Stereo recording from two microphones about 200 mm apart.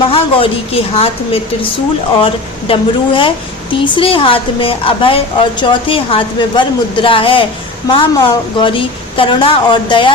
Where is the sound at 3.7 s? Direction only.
25° left (ahead or behind).